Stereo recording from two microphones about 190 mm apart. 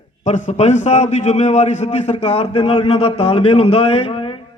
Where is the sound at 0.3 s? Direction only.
40° left (ahead or behind).